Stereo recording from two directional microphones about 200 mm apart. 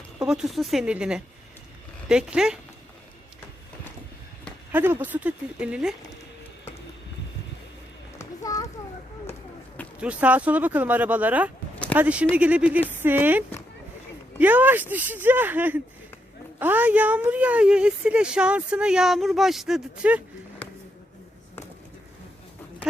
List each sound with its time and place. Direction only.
0.2 s a woman's voice: 5° right (ahead or behind)
4.7 s speech: 10° right (ahead or behind)
8.2 s a sound: 15° left (ahead or behind)
10.0 s a woman's voice: 5° right (ahead or behind)